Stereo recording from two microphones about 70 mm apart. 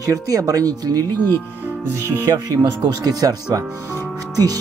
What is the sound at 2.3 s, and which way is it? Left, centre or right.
Speech, right.